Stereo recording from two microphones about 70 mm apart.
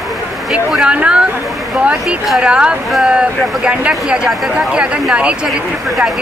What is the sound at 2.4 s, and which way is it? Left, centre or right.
Speech, centre.